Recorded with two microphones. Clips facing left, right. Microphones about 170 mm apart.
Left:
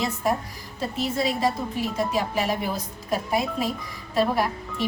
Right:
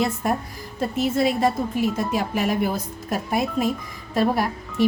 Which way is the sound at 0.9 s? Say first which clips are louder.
Right 5 dB; 50° right (ahead or behind).